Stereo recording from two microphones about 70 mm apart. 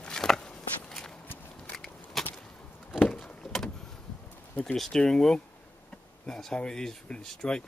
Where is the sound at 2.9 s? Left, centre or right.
Centre.